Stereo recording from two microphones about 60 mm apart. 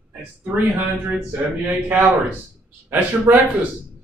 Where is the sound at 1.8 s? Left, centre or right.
Right.